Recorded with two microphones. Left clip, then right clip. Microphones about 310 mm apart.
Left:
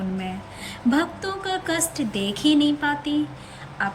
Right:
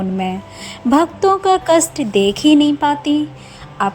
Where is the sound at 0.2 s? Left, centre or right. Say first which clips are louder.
Right 10 dB; centre.